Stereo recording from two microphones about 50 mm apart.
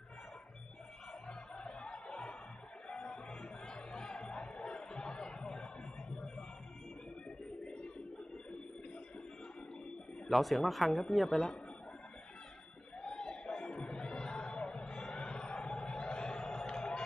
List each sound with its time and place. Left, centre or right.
1.2 s music: centre
7.6 s a sound: centre
10.2 s speech: centre
13.0 s music: centre